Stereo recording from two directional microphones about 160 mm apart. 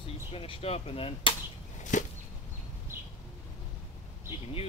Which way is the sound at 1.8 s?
50° left (ahead or behind).